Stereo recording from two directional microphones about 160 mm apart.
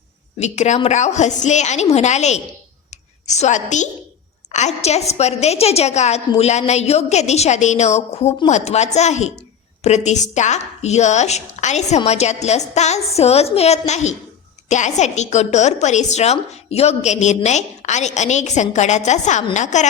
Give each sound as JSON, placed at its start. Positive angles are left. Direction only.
{"t": 0.3, "sound": "a woman's voice", "side_deg": 45}
{"t": 2.9, "sound": "a sound", "side_deg": 45}
{"t": 4.5, "sound": "a woman's voice", "side_deg": 45}